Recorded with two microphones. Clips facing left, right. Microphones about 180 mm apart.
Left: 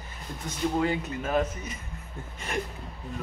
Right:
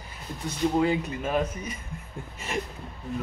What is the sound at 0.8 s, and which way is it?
Speech, 10° right (ahead or behind).